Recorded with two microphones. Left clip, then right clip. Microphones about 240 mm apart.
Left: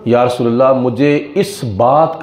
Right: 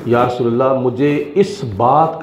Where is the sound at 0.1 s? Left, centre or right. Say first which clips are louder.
Left 2 dB; left.